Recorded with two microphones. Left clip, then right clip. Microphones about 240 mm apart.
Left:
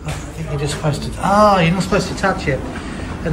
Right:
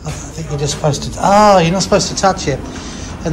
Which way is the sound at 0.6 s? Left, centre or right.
Centre.